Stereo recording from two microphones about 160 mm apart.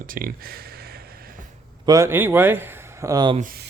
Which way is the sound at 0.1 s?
65° right (ahead or behind).